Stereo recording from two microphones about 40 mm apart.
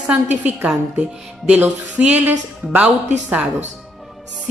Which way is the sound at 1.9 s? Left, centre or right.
Right.